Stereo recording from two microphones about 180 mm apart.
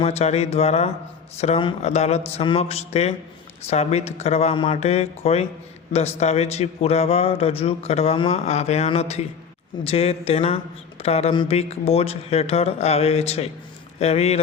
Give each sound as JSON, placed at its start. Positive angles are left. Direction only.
{"t": 0.0, "sound": "a man's voice", "side_deg": 35}